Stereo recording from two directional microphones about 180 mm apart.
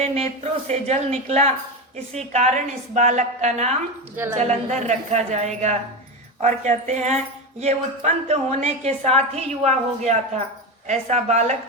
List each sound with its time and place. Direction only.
0.0 s a woman's voice: 35° right (ahead or behind)